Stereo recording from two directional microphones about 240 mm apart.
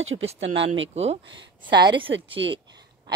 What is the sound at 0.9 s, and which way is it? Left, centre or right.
A woman's voice, right.